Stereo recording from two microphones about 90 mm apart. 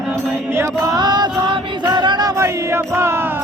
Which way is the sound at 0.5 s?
35° right (ahead or behind).